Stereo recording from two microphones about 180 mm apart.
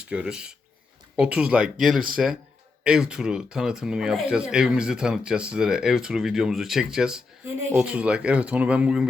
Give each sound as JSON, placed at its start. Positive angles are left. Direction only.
{"t": 0.0, "sound": "speech", "side_deg": -5}